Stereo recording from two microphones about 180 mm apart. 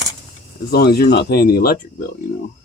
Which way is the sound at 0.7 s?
60° left (ahead or behind).